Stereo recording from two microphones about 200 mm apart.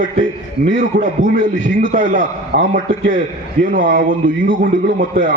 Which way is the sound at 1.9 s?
40° right (ahead or behind).